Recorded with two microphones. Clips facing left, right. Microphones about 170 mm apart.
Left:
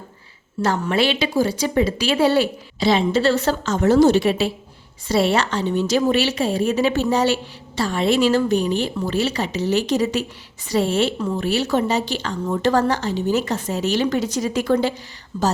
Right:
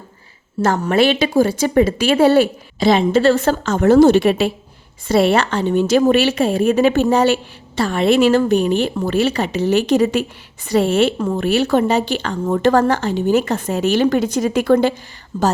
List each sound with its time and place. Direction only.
0.6 s a woman's voice: 45° right (ahead or behind)
15.3 s a woman's voice: 45° right (ahead or behind)